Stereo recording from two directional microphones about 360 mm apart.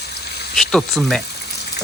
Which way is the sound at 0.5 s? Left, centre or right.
Centre.